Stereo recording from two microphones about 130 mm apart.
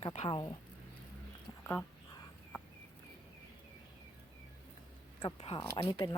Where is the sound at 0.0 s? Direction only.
55° left (ahead or behind).